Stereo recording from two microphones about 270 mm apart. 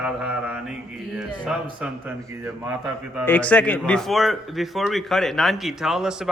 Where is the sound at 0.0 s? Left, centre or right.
Centre.